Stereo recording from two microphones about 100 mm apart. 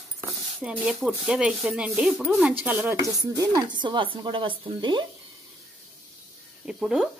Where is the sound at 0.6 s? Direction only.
10° right (ahead or behind).